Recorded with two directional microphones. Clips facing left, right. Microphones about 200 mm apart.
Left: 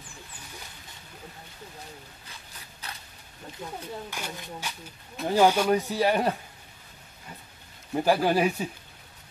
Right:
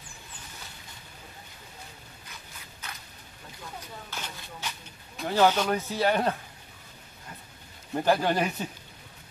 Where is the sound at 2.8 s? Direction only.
35° left (ahead or behind).